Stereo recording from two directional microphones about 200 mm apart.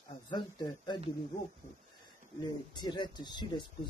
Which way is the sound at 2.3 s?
20° left (ahead or behind).